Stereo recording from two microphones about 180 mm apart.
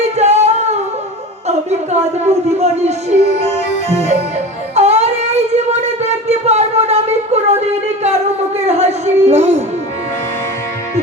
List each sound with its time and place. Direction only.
0.2 s singing: 40° right (ahead or behind)
1.5 s speech: 40° right (ahead or behind)
3.8 s music: 40° right (ahead or behind)
4.7 s a sound: 35° right (ahead or behind)